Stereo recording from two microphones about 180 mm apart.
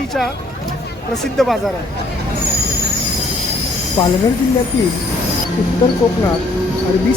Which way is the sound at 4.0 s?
25° left (ahead or behind).